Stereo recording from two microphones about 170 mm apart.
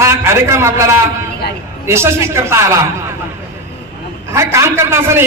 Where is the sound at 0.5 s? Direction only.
15° right (ahead or behind).